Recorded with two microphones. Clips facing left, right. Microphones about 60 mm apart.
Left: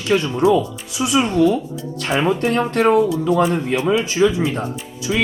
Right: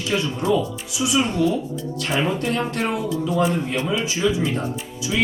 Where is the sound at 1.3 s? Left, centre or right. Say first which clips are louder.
Left 5 dB; left.